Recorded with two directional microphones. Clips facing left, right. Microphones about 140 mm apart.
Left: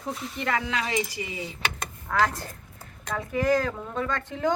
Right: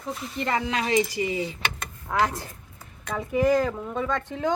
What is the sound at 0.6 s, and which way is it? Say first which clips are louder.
Speech: right 4 dB; 25° right (ahead or behind).